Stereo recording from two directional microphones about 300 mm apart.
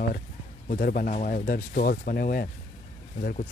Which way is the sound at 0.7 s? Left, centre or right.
Left.